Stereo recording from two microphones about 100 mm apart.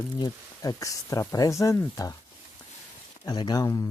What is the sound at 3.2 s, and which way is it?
Speech, 45° left (ahead or behind).